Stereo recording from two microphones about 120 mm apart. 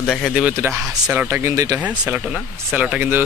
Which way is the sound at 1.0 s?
15° right (ahead or behind).